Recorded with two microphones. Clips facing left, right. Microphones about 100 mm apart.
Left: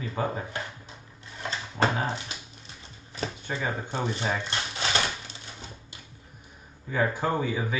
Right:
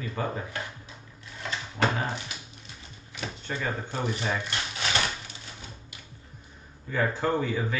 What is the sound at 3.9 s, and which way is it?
Speech, 20° left (ahead or behind).